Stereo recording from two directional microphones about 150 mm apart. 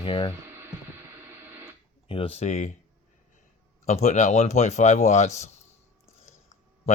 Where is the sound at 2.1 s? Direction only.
40° left (ahead or behind).